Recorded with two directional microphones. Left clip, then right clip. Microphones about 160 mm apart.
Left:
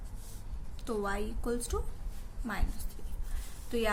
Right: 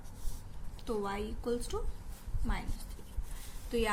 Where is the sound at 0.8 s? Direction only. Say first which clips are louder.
Left 2 dB; 30° left (ahead or behind).